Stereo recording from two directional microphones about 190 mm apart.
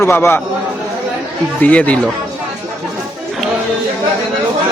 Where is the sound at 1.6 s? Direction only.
5° left (ahead or behind).